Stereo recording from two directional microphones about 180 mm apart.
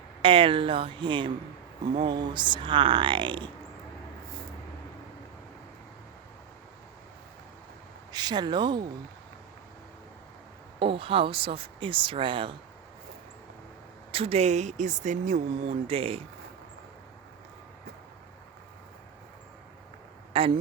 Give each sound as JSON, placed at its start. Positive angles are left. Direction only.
{"t": 0.2, "sound": "speech", "side_deg": -30}
{"t": 8.1, "sound": "speech", "side_deg": -25}
{"t": 10.8, "sound": "speech", "side_deg": -30}
{"t": 14.1, "sound": "speech", "side_deg": -35}
{"t": 20.3, "sound": "speech", "side_deg": -30}